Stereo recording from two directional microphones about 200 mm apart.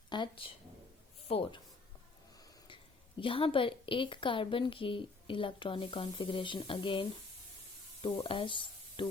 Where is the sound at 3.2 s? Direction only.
25° left (ahead or behind).